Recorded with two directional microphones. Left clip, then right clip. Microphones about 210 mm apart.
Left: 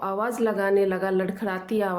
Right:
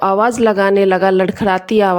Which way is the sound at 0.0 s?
40° right (ahead or behind).